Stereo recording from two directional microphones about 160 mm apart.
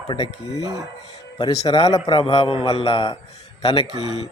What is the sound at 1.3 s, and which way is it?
Speech, 25° left (ahead or behind).